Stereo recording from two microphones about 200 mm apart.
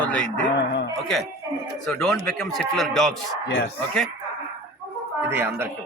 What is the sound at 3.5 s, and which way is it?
Speech, 60° left (ahead or behind).